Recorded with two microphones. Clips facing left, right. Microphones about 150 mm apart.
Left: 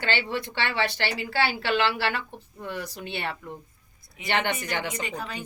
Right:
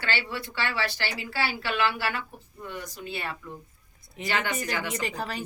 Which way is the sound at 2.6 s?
90° left.